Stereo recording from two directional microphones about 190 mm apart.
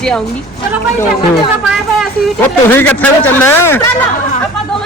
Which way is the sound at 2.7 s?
10° left (ahead or behind).